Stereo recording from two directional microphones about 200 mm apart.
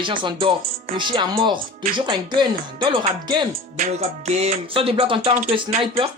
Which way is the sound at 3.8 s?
35° right (ahead or behind).